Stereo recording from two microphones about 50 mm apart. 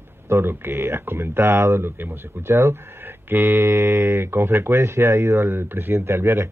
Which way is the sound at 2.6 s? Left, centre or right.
Right.